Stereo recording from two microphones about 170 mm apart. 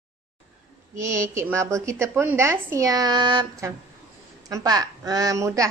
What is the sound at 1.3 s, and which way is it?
A woman's voice, 15° right (ahead or behind).